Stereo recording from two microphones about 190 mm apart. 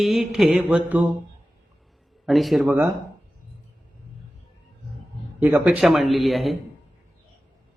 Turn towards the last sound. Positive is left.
turn(degrees=0)  # may be behind; listen again after turning